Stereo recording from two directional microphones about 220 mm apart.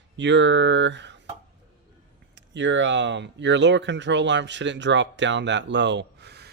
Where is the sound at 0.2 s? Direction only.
55° right (ahead or behind).